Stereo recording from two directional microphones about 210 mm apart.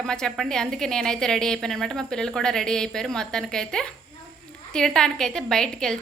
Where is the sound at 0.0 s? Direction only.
5° left (ahead or behind).